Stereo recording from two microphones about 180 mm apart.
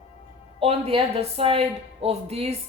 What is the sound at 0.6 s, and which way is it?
A woman's voice, 30° right (ahead or behind).